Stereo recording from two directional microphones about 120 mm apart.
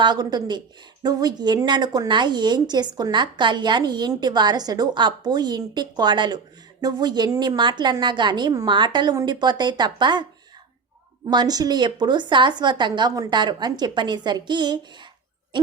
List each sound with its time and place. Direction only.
0.0 s a woman's voice: 35° right (ahead or behind)
11.3 s a woman's voice: 35° right (ahead or behind)
15.5 s hoot: 40° right (ahead or behind)